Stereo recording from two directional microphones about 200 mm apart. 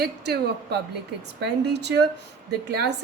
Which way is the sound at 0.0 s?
55° right (ahead or behind).